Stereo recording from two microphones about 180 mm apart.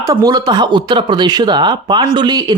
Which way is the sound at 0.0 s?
20° right (ahead or behind).